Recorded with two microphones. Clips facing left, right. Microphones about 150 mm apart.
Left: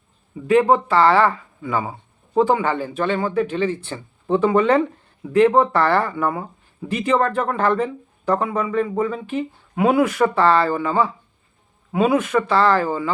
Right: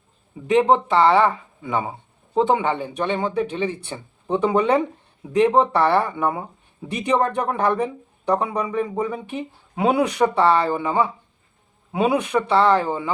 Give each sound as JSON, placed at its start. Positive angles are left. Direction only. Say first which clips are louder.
{"t": 0.4, "sound": "speech", "louder": "left 1 dB", "side_deg": -20}